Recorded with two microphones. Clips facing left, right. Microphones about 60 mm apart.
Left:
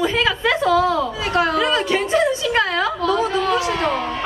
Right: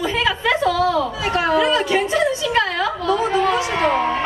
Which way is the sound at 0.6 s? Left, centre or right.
Left.